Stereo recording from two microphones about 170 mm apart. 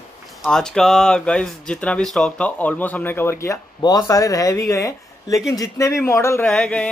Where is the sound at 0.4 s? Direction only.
5° left (ahead or behind).